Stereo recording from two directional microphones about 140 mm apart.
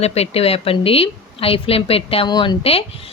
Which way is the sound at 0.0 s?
50° left (ahead or behind).